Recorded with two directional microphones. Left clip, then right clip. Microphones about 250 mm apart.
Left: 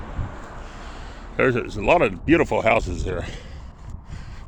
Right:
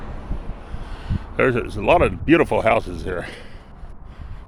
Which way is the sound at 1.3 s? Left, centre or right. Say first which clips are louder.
Right 1 dB; centre.